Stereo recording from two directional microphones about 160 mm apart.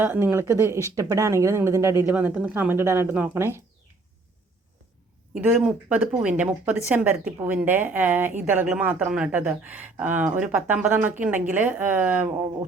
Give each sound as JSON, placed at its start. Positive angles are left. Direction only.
{"t": 0.0, "sound": "speech", "side_deg": -15}
{"t": 5.3, "sound": "speech", "side_deg": -10}